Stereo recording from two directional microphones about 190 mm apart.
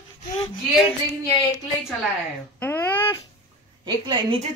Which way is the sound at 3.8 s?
25° right (ahead or behind).